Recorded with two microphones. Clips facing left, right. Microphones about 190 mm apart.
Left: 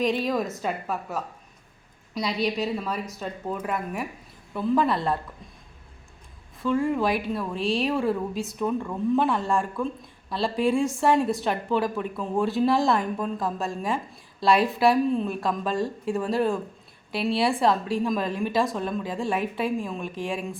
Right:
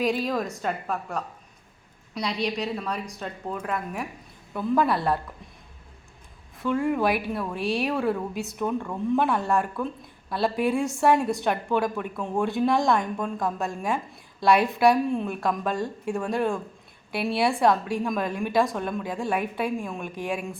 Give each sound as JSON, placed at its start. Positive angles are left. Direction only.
{"t": 0.0, "sound": "a woman's voice", "side_deg": 0}
{"t": 6.6, "sound": "a woman's voice", "side_deg": 0}
{"t": 7.5, "sound": "speech", "side_deg": 25}
{"t": 7.8, "sound": "a woman's voice", "side_deg": 0}